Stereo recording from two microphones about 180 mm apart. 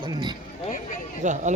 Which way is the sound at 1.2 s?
40° right (ahead or behind).